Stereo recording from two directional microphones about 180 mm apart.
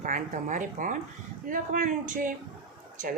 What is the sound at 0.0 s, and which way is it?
A woman's voice, 45° right (ahead or behind).